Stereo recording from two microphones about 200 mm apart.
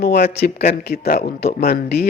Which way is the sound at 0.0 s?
50° left (ahead or behind).